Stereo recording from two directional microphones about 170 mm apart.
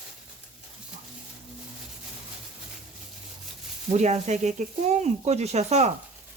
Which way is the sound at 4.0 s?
40° right (ahead or behind).